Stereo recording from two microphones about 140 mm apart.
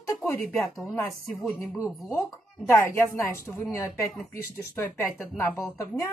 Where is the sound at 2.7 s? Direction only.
20° left (ahead or behind).